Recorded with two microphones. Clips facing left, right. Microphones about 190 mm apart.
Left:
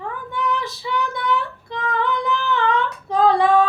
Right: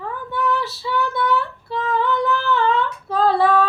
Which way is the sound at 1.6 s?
15° left (ahead or behind).